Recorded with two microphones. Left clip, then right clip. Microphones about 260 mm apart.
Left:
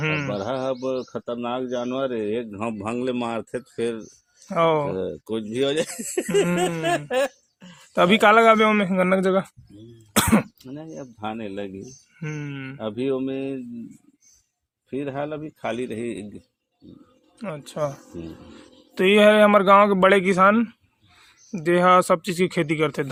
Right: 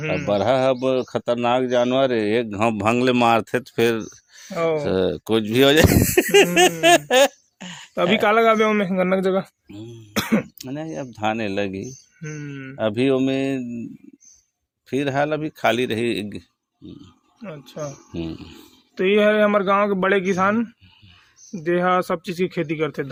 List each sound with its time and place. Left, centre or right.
0.0 s speech: left
0.3 s speech: right
4.5 s speech: centre
4.9 s speech: right
7.9 s speech: centre
10.2 s throat clearing: centre
10.6 s a man's voice: right
12.2 s speech: centre
12.7 s speech: right
14.8 s a man's voice: right
17.4 s speech: left
18.9 s speech: centre